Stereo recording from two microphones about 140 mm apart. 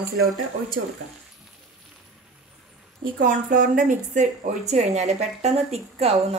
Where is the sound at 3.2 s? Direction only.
80° right.